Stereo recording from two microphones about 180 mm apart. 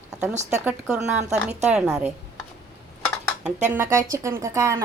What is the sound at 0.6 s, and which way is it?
Speech, 5° right (ahead or behind).